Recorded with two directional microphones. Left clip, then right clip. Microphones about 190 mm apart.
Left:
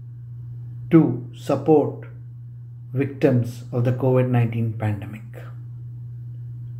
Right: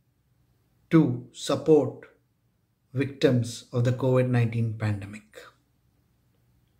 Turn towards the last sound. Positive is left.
turn(degrees=-20)  # may be behind; listen again after turning